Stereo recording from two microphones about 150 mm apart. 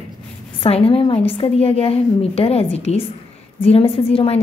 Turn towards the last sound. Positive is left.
turn(degrees=40)  # may be behind; listen again after turning